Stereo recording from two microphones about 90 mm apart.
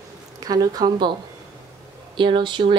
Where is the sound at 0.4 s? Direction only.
45° right (ahead or behind).